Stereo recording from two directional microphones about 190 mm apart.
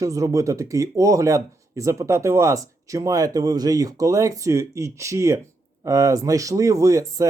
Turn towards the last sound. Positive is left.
turn(degrees=-15)  # may be behind; listen again after turning